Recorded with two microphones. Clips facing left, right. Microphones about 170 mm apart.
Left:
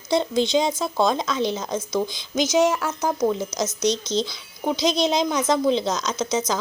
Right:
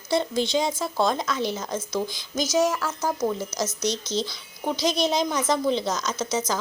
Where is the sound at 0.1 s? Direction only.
20° left (ahead or behind).